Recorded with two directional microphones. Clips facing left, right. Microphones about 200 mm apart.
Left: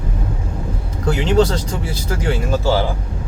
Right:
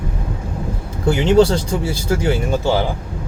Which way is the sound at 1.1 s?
30° right (ahead or behind).